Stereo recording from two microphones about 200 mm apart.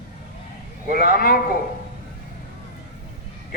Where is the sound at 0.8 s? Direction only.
45° left (ahead or behind).